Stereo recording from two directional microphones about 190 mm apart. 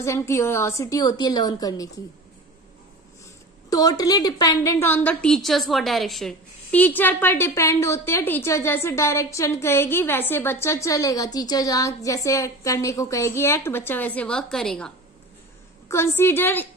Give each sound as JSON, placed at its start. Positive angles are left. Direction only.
{"t": 0.0, "sound": "a woman's voice", "side_deg": 15}
{"t": 3.7, "sound": "a woman's voice", "side_deg": 20}
{"t": 15.9, "sound": "a woman's voice", "side_deg": 15}